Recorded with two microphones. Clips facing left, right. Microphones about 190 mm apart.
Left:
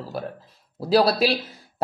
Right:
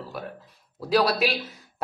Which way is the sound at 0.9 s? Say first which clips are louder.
Left 3 dB; 35° left (ahead or behind).